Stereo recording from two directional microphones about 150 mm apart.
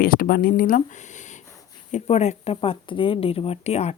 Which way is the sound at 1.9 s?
45° left (ahead or behind).